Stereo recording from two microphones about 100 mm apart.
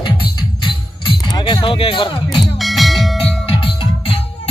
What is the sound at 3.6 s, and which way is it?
Music, 70° left (ahead or behind).